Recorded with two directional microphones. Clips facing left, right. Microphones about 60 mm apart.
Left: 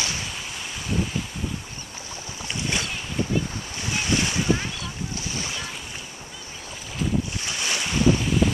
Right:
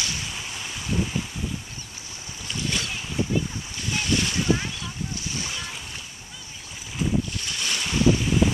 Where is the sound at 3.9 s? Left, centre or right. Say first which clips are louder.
Left 1 dB; centre.